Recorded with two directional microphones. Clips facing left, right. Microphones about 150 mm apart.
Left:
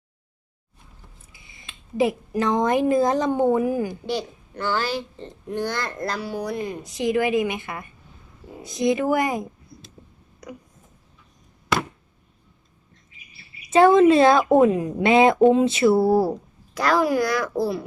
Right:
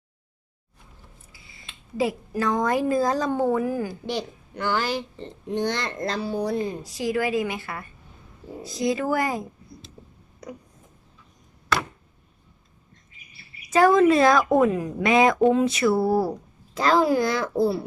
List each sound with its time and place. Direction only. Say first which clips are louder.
1.3 s speech: left 1 dB; 20° left (ahead or behind)
4.5 s a child's voice: even; 15° right (ahead or behind); by 6.7 s 30° right (ahead or behind)
6.8 s a woman's voice: left 3 dB; 20° left (ahead or behind)
13.7 s a woman's voice: left 3 dB; 25° left (ahead or behind)
16.8 s a child's voice: even; 25° right (ahead or behind)